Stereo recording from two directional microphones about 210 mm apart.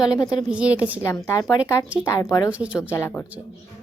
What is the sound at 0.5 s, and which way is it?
Speech, 5° right (ahead or behind).